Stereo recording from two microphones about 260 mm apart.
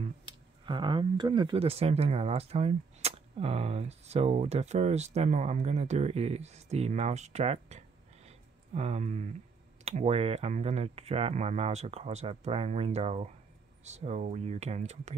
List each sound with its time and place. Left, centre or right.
0.0 s speech: centre